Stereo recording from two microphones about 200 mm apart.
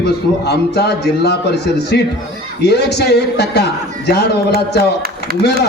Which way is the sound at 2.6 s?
55° left (ahead or behind).